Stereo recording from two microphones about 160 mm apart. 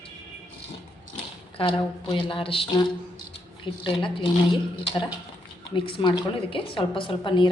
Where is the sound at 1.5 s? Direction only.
35° left (ahead or behind).